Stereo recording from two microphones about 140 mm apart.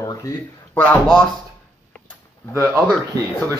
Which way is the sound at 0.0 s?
25° left (ahead or behind).